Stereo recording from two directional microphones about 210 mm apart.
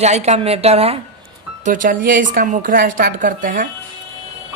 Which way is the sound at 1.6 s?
40° right (ahead or behind).